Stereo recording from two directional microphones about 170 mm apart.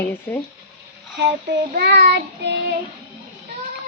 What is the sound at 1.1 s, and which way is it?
Child singing, 80° right.